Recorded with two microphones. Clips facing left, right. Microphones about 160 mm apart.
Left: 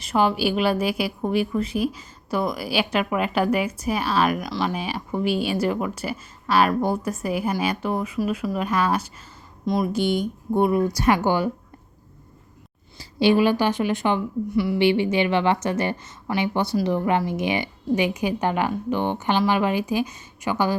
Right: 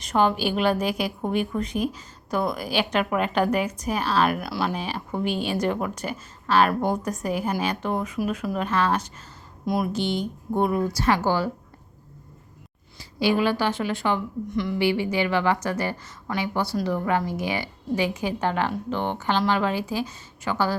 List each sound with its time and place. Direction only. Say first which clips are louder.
0.0 s a woman's voice: left 1 dB; 5° left (ahead or behind)
4.4 s speech: left 1 dB; 5° right (ahead or behind)
4.7 s a woman's voice: left 2 dB; 10° left (ahead or behind)
9.6 s speech: left 2 dB; 5° right (ahead or behind)
9.9 s a woman's voice: left 4 dB; 10° left (ahead or behind)
13.0 s a sound: left 4 dB; 25° left (ahead or behind)
13.4 s a woman's voice: left 3 dB; 15° left (ahead or behind)
14.5 s a woman's voice: left 4 dB; 5° left (ahead or behind)
14.8 s a woman's voice: left 3 dB; 25° left (ahead or behind)